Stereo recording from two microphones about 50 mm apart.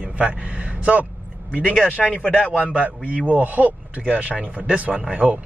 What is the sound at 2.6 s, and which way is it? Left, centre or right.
Speech, right.